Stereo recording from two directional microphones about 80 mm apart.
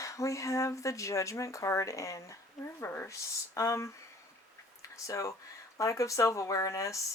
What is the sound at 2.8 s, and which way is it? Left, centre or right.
Speech, left.